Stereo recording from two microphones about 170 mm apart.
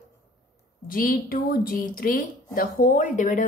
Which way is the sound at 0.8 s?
55° left (ahead or behind).